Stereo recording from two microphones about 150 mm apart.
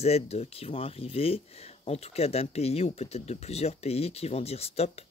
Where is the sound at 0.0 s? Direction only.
45° left (ahead or behind).